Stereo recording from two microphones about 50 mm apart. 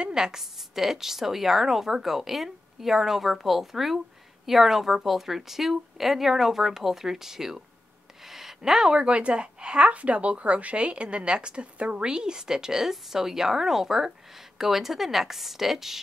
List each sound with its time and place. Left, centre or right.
0.0 s a woman's voice: centre